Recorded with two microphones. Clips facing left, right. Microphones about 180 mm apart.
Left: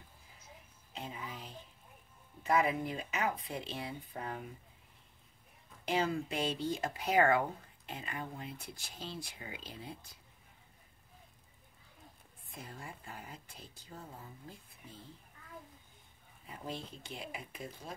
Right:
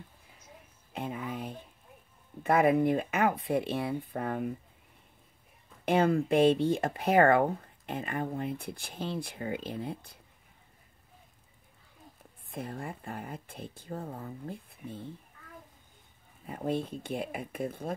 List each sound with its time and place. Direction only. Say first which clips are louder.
0.9 s speech: right 9 dB; 55° right (ahead or behind)
5.9 s speech: right 8 dB; 55° right (ahead or behind)
12.4 s speech: right 10 dB; 55° right (ahead or behind)
16.4 s speech: right 11 dB; 55° right (ahead or behind)